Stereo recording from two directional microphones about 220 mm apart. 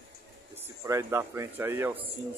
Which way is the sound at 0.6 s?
10° right (ahead or behind).